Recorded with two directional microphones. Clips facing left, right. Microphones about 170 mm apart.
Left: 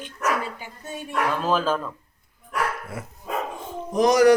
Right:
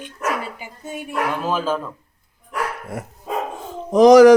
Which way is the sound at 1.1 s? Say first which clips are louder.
Even; 10° right (ahead or behind).